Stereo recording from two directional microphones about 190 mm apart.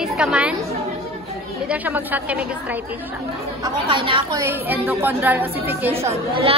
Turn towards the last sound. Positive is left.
turn(degrees=-30)  # may be behind; listen again after turning